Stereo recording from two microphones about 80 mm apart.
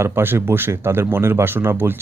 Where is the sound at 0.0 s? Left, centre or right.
Right.